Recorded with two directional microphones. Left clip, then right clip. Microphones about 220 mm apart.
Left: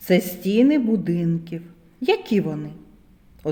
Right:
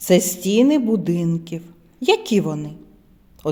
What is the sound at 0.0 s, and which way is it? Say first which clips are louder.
A woman's voice: right 4 dB; 25° right (ahead or behind).